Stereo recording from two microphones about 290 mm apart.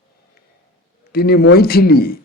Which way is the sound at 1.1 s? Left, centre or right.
Left.